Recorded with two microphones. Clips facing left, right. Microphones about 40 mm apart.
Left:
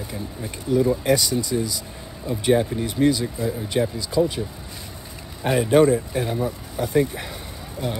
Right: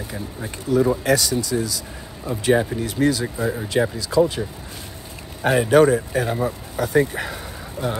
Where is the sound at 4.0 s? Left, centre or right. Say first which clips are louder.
Right 4 dB; right.